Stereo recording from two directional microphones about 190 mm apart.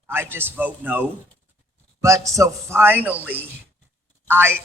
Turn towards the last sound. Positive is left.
turn(degrees=-10)  # may be behind; listen again after turning